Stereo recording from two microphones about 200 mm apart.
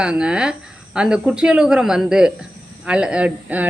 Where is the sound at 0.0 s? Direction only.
5° right (ahead or behind).